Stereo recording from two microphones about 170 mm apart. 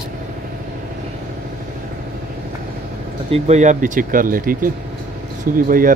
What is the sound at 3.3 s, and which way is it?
Speech, 45° right (ahead or behind).